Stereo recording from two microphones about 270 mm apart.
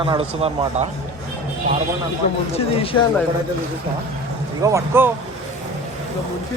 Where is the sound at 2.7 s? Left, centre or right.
Left.